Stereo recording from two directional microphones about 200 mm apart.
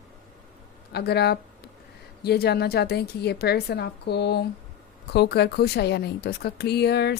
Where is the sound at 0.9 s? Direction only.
55° left (ahead or behind).